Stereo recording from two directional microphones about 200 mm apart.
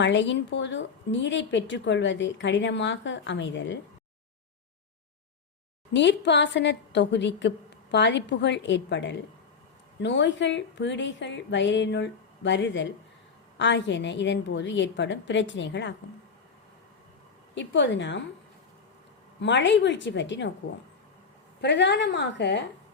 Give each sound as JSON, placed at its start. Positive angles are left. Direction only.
{"t": 0.0, "sound": "a woman's voice", "side_deg": 65}
{"t": 5.9, "sound": "a woman's voice", "side_deg": 60}
{"t": 17.5, "sound": "a woman's voice", "side_deg": 60}
{"t": 19.4, "sound": "a woman's voice", "side_deg": 65}
{"t": 21.6, "sound": "a woman's voice", "side_deg": 60}